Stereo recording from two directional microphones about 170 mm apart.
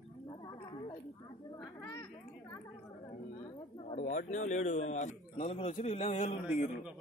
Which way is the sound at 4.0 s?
45° left (ahead or behind).